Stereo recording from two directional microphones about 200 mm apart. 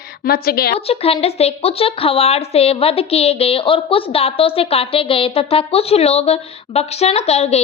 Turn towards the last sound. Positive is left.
turn(degrees=30)  # may be behind; listen again after turning